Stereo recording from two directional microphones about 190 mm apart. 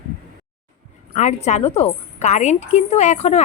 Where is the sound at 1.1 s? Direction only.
40° left (ahead or behind).